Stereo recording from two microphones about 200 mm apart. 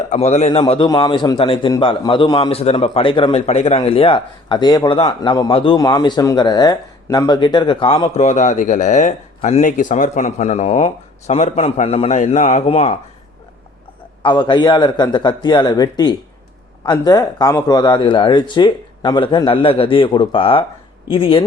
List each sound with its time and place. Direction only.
0.1 s a man's voice: 35° left (ahead or behind)
0.6 s a man's voice: 25° left (ahead or behind)
14.2 s a man's voice: 25° left (ahead or behind)